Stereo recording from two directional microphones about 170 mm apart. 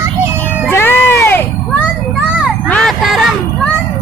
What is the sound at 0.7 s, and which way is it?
Cat, 15° left (ahead or behind).